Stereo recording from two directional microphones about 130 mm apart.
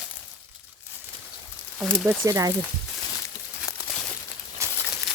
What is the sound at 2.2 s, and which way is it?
Speech, 25° right (ahead or behind).